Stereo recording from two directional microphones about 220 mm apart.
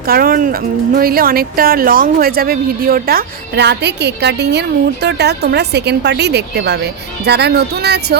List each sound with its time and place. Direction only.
0.0 s speech: 40° right (ahead or behind)